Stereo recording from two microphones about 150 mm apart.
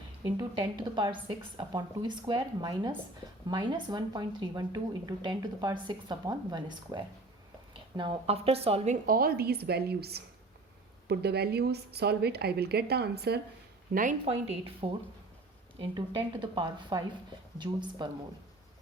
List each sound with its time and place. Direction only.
0.3 s speech: 30° right (ahead or behind)
9.0 s a woman's voice: 80° right
13.9 s speech: 60° right (ahead or behind)
14.3 s speech: 40° right (ahead or behind)